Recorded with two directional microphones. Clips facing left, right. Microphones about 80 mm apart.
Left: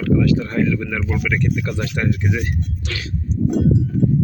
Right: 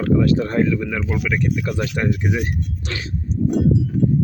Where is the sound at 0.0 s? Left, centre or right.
Right.